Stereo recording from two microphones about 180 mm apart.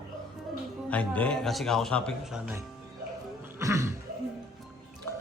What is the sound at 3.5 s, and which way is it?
Cough, 15° right (ahead or behind).